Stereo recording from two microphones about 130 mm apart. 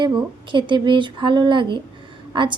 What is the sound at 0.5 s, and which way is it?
A woman's voice, 40° right (ahead or behind).